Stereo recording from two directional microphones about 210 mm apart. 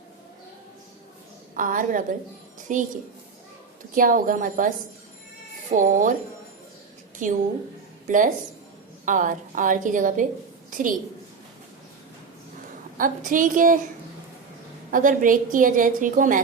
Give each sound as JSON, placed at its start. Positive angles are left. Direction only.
{"t": 1.5, "sound": "a woman's voice", "side_deg": -40}
{"t": 3.9, "sound": "a woman's voice", "side_deg": -40}
{"t": 5.7, "sound": "a woman's voice", "side_deg": -40}
{"t": 7.2, "sound": "a woman's voice", "side_deg": -40}
{"t": 13.0, "sound": "a woman's voice", "side_deg": -40}
{"t": 14.8, "sound": "a woman's voice", "side_deg": -40}